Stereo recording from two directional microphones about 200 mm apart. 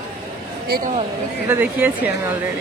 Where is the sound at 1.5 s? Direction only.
10° right (ahead or behind).